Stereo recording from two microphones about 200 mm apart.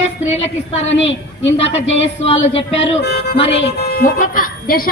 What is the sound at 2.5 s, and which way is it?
Speech, 30° left (ahead or behind).